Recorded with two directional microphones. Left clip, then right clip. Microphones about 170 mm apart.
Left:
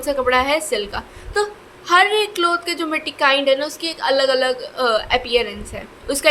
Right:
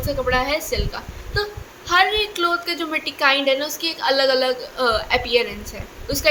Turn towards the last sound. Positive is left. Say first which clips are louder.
# left 3 dB
turn(degrees=30)  # may be behind; listen again after turning